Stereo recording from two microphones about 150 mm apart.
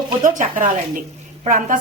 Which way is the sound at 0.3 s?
60° right (ahead or behind).